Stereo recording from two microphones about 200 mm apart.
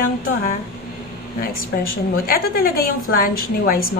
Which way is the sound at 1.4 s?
45° left (ahead or behind).